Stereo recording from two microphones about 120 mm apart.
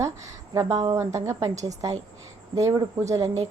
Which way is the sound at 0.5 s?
30° right (ahead or behind).